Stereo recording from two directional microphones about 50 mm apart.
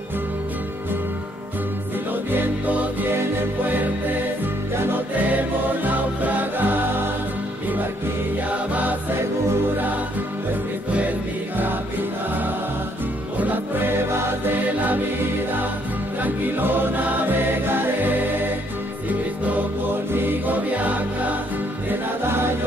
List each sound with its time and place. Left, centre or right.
2.3 s music: right
5.9 s music: right
8.5 s music: right
10.9 s music: right
13.4 s music: right
16.2 s music: right
20.1 s music: right